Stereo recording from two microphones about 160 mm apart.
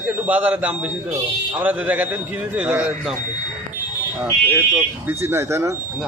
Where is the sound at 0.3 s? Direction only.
10° right (ahead or behind).